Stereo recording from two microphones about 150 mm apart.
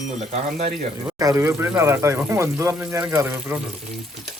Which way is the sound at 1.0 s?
20° right (ahead or behind).